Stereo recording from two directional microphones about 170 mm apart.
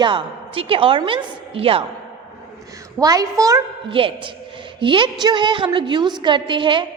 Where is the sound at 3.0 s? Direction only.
20° right (ahead or behind).